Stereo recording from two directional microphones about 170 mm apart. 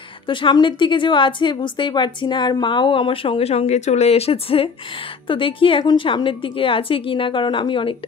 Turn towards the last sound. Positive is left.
turn(degrees=30)  # may be behind; listen again after turning